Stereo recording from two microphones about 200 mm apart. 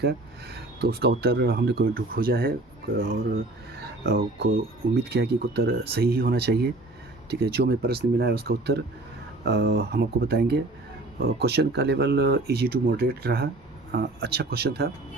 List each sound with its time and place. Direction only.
0.5 s speech: 50° right (ahead or behind)
4.9 s speech: 55° right (ahead or behind)